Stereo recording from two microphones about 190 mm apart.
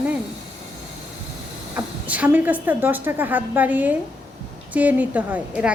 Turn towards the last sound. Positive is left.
turn(degrees=-5)  # may be behind; listen again after turning